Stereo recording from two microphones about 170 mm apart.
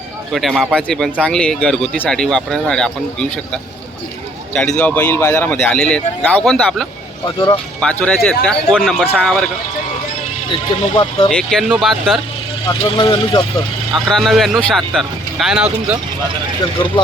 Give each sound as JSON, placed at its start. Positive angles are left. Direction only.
{"t": 0.3, "sound": "speech", "side_deg": 0}
{"t": 4.8, "sound": "speech", "side_deg": 10}
{"t": 7.3, "sound": "speech", "side_deg": 25}
{"t": 7.8, "sound": "speech", "side_deg": 5}
{"t": 10.5, "sound": "speech", "side_deg": 30}
{"t": 11.3, "sound": "speech", "side_deg": 5}
{"t": 12.6, "sound": "speech", "side_deg": 25}
{"t": 13.9, "sound": "speech", "side_deg": 0}